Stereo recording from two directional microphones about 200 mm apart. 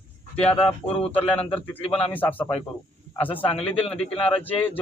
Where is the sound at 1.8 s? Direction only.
30° left (ahead or behind).